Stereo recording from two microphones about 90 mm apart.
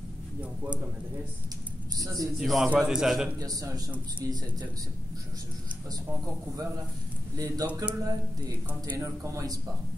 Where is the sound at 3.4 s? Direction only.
45° right (ahead or behind).